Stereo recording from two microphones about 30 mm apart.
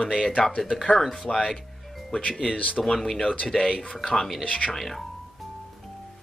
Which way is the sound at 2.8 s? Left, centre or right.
Centre.